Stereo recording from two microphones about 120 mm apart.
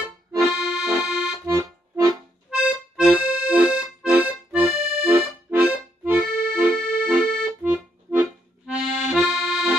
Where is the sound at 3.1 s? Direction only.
15° right (ahead or behind).